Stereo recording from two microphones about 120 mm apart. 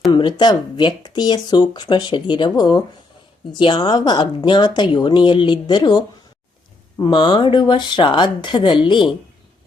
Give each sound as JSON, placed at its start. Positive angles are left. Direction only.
{"t": 0.1, "sound": "speech", "side_deg": 40}
{"t": 7.0, "sound": "speech", "side_deg": 40}